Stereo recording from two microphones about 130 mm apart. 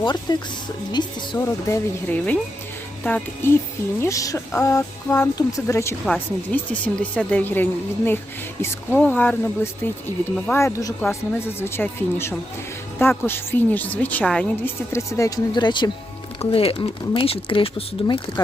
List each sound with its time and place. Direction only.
0.0 s a woman's voice: 35° left (ahead or behind)
1.4 s speech: 20° left (ahead or behind)
4.0 s speech: 25° left (ahead or behind)
14.9 s speech: 20° left (ahead or behind)
15.5 s a woman's voice: 35° left (ahead or behind)
16.4 s speech: 45° left (ahead or behind)